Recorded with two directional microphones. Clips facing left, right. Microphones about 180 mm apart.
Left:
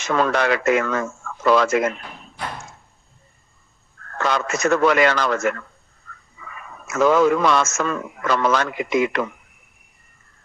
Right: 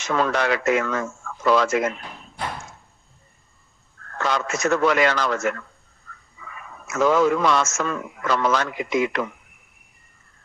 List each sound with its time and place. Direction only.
0.0 s a man's voice: 65° left (ahead or behind)
4.2 s a man's voice: 60° left (ahead or behind)
6.8 s a man's voice: 65° left (ahead or behind)